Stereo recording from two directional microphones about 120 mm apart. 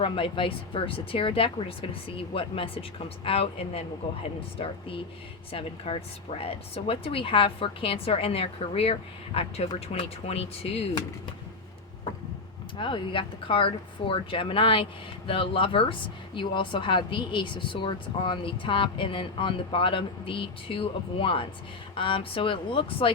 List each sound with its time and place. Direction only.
0.0 s speech: 45° left (ahead or behind)
12.7 s speech: 45° left (ahead or behind)